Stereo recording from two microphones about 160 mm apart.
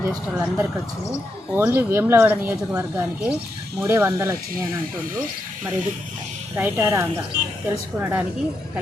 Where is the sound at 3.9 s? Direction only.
15° right (ahead or behind).